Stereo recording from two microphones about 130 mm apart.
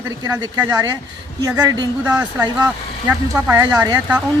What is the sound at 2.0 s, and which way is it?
Speech, 10° right (ahead or behind).